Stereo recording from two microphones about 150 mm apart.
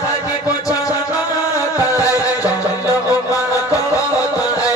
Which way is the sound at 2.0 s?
20° left (ahead or behind).